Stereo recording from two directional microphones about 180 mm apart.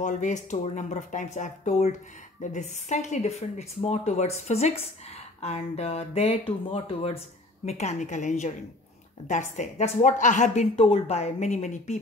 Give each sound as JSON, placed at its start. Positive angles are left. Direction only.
{"t": 0.0, "sound": "speech", "side_deg": 45}